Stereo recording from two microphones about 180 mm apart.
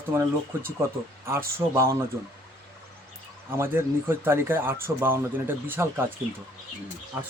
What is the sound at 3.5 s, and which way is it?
Speech, 15° right (ahead or behind).